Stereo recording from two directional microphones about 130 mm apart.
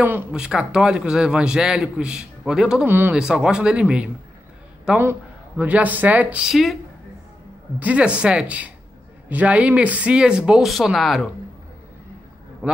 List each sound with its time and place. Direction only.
0.0 s a man's voice: 10° right (ahead or behind)
7.8 s a man's voice: 10° right (ahead or behind)
12.6 s a sound: 15° right (ahead or behind)